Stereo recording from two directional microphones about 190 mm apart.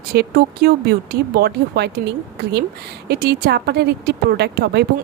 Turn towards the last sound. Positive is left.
turn(degrees=-60)  # may be behind; listen again after turning